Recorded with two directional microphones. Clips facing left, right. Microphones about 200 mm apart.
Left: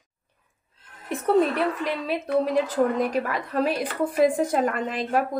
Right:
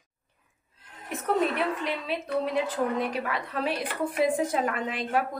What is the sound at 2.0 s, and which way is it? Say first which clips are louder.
A woman's voice: left 7 dB; 40° left (ahead or behind).